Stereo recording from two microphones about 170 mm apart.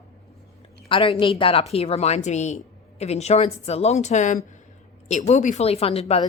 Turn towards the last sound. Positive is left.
turn(degrees=35)  # may be behind; listen again after turning